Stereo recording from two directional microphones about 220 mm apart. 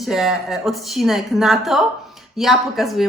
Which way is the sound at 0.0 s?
Centre (ahead or behind).